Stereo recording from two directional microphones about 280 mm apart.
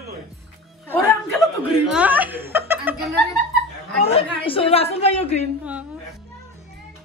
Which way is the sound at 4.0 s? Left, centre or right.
Left.